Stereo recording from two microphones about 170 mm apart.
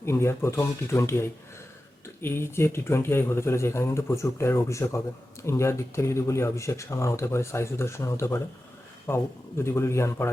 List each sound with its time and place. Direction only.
0.0 s speech: 15° left (ahead or behind)